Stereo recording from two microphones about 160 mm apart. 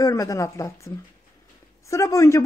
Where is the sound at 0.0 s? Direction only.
20° left (ahead or behind).